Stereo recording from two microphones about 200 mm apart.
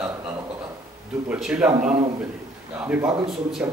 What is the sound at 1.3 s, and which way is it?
A man's voice, 5° right (ahead or behind).